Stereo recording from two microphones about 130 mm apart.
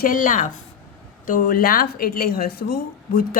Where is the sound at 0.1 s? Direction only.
90° left.